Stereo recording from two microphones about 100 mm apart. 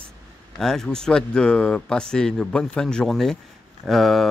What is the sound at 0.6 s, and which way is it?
Speech, 5° left (ahead or behind).